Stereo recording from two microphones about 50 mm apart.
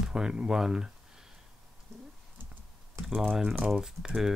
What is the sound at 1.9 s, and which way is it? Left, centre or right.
Typing, right.